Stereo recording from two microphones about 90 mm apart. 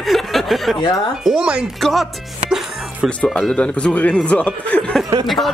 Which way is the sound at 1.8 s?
Centre (ahead or behind).